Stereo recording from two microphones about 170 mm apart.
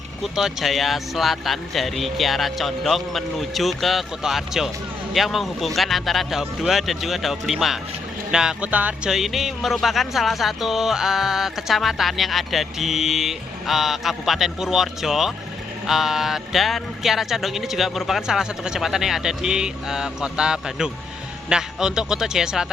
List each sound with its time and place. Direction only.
0.2 s speech: centre (ahead or behind)